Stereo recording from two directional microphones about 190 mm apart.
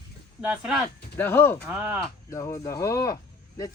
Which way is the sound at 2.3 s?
20° left (ahead or behind).